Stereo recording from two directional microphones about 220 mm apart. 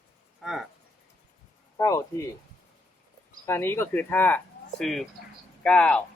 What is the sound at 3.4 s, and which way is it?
Speech, 10° left (ahead or behind).